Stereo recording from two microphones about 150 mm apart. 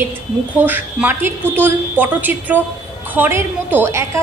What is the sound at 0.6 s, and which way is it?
A woman's voice, 10° right (ahead or behind).